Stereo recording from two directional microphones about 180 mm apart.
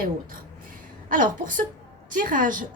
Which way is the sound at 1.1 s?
45° right (ahead or behind).